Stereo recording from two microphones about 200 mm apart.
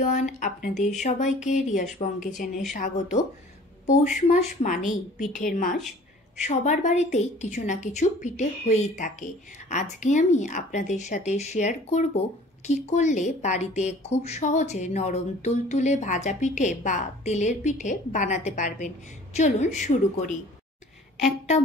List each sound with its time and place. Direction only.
0.0 s a woman's voice: 40° left (ahead or behind)